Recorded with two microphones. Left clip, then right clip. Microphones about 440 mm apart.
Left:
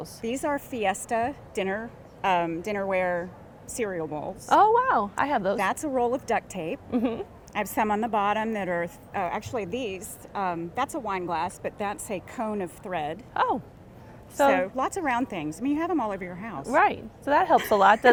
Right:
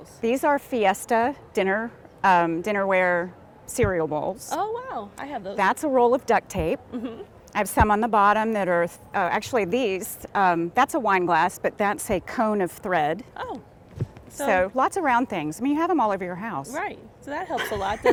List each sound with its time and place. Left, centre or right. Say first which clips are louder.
0.2 s a woman's voice: right 7 dB; right
4.4 s a woman's voice: left 9 dB; left
5.5 s speech: right 5 dB; right
6.9 s speech: left 6 dB; left
7.5 s a woman's voice: right 5 dB; right
13.3 s a woman's voice: left 9 dB; left
14.4 s a woman's voice: right 2 dB; right
16.7 s a woman's voice: left 9 dB; left